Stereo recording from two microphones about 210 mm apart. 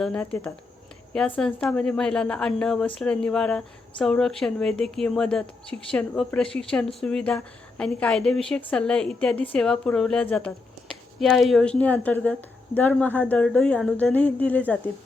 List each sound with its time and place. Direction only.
0.0 s a woman's voice: 5° left (ahead or behind)